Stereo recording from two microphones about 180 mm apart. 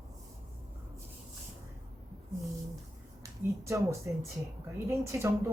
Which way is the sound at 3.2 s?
15° right (ahead or behind).